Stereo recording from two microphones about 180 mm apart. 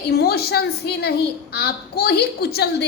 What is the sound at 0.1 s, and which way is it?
A woman's voice, 60° left (ahead or behind).